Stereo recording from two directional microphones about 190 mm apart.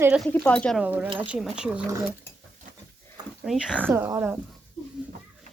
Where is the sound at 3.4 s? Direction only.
5° right (ahead or behind).